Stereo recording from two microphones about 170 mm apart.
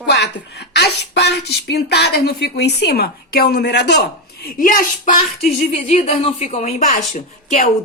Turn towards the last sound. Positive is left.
turn(degrees=45)  # may be behind; listen again after turning